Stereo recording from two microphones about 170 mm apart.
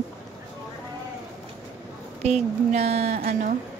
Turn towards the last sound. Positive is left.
turn(degrees=-45)  # may be behind; listen again after turning